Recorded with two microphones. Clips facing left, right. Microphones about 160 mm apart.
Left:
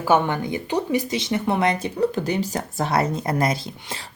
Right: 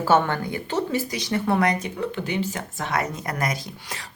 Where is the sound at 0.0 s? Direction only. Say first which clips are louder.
Left 1 dB; 15° left (ahead or behind).